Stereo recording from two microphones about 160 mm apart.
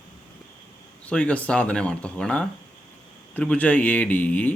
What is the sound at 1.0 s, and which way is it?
Speech, 10° left (ahead or behind).